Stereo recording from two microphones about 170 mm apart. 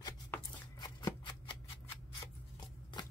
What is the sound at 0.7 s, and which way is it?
Scissors, 25° left (ahead or behind).